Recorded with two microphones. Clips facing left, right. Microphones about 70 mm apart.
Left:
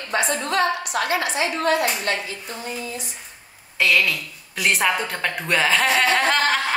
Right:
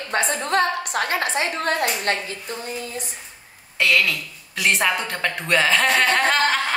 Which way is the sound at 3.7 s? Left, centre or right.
Centre.